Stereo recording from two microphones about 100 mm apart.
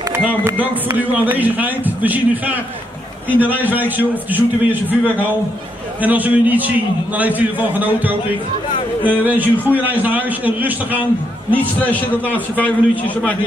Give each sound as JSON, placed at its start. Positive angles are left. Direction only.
{"t": 0.1, "sound": "a man's voice", "side_deg": -25}
{"t": 11.5, "sound": "a man's voice", "side_deg": 15}